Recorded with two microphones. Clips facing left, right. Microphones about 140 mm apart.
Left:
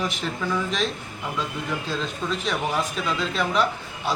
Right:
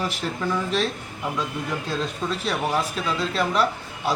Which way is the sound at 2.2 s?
10° right (ahead or behind).